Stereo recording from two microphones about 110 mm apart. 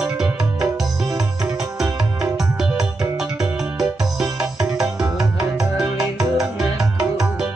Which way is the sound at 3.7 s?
5° right (ahead or behind).